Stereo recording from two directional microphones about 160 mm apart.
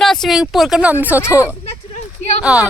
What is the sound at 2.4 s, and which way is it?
Speech, 5° right (ahead or behind).